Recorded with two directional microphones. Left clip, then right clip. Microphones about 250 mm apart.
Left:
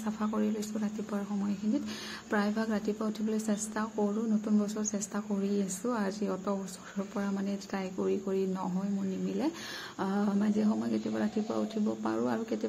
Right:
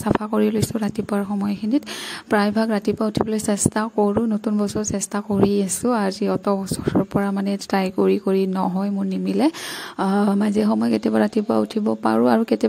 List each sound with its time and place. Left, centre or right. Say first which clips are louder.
0.0 s a woman's voice: right 14 dB; right